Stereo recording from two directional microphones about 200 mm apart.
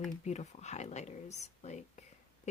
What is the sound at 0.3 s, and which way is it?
Speech, 35° left (ahead or behind).